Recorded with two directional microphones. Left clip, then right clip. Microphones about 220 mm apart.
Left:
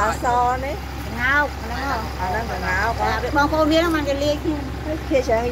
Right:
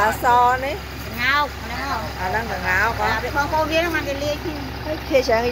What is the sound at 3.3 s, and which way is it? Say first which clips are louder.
Speech: left 4 dB; 45° left (ahead or behind).